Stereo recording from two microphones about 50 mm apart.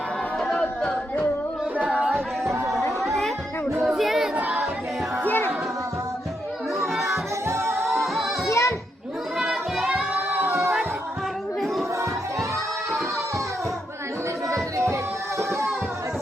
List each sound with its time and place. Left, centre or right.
0.4 s a sound: centre
0.9 s a sound: left
1.8 s singing: right
3.0 s chatter: centre
3.8 s crowd: centre
6.9 s music: centre
7.4 s singing: right
8.4 s children playing: left
9.4 s music: centre
10.2 s singing: right
14.5 s music: right